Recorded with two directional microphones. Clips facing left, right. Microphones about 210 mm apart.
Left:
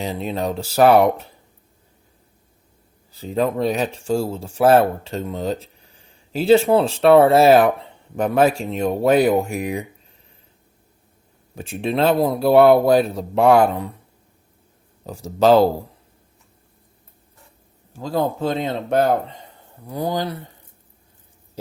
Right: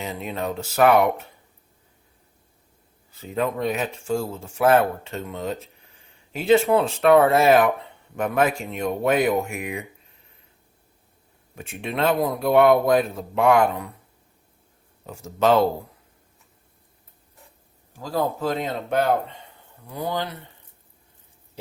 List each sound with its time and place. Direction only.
0.0 s speech: 35° left (ahead or behind)
3.1 s speech: 35° left (ahead or behind)
11.5 s speech: 35° left (ahead or behind)
15.0 s speech: 35° left (ahead or behind)
18.0 s speech: 25° left (ahead or behind)